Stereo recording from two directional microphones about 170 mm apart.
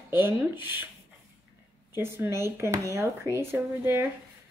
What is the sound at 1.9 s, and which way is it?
Speech, 15° right (ahead or behind).